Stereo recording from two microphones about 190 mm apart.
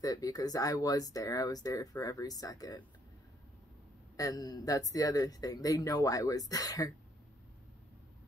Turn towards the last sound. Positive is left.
turn(degrees=20)  # may be behind; listen again after turning